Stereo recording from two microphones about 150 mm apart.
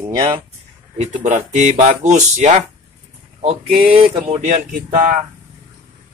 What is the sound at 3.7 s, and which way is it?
Speech, 35° right (ahead or behind).